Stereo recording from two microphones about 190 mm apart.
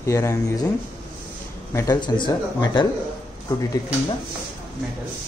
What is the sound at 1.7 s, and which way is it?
Speech, 20° left (ahead or behind).